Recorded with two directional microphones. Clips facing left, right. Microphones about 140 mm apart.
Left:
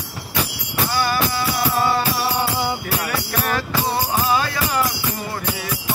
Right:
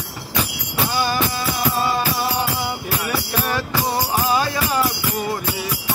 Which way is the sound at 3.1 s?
15° right (ahead or behind).